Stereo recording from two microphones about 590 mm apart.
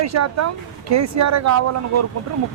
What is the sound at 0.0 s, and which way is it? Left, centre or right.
Speech, right.